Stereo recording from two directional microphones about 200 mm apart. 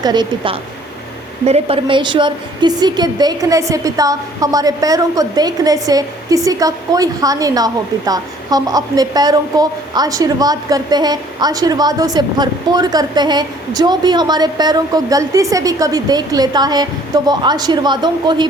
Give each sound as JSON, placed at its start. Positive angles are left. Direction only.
{"t": 0.0, "sound": "a woman's voice", "side_deg": -20}